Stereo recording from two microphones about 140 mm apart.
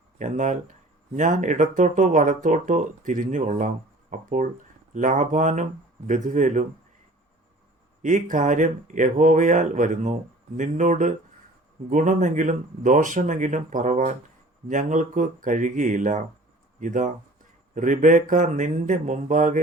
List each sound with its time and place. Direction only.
0.2 s speech: 60° right (ahead or behind)
8.0 s speech: 65° right (ahead or behind)